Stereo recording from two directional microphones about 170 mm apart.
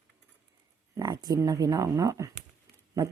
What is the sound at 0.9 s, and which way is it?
Speech, 25° right (ahead or behind).